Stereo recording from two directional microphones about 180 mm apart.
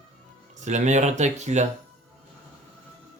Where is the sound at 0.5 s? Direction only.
40° right (ahead or behind).